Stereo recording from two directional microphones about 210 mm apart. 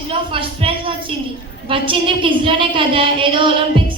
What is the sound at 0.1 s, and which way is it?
A woman's voice, 25° right (ahead or behind).